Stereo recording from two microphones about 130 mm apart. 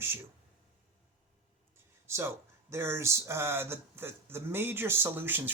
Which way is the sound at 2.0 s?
20° right (ahead or behind).